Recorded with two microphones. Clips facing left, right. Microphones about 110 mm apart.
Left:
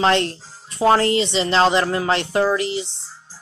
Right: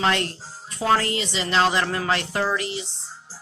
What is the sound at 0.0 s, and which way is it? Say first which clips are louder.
Speech: left 5 dB; 30° left (ahead or behind).